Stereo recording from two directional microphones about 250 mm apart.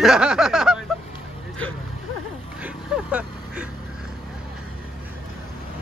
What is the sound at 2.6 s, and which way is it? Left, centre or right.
Speech, centre.